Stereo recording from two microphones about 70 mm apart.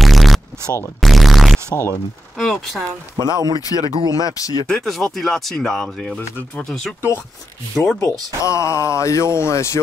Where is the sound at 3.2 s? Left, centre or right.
Right.